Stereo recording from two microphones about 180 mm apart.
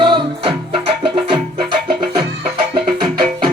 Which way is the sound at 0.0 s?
25° right (ahead or behind).